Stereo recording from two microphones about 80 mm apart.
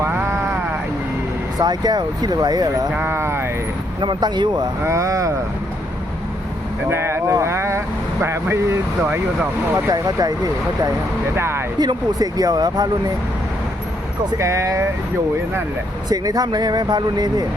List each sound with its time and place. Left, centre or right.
0.0 s a sound: right
1.5 s speech: right
3.0 s speech: right
4.0 s speech: right
4.8 s speech: right
6.9 s speech: right
9.7 s speech: right
11.3 s speech: right
11.8 s speech: right
14.3 s speech: right
16.0 s speech: right